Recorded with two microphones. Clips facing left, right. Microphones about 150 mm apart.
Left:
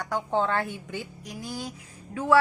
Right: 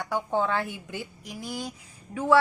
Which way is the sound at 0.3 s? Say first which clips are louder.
Left 1 dB; 10° right (ahead or behind).